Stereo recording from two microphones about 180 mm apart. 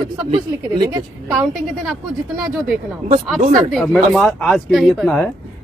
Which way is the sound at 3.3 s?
Centre (ahead or behind).